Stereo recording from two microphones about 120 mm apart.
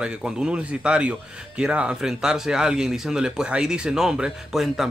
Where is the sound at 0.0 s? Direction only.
5° right (ahead or behind).